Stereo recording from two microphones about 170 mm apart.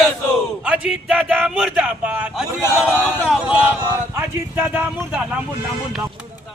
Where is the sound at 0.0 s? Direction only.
Centre (ahead or behind).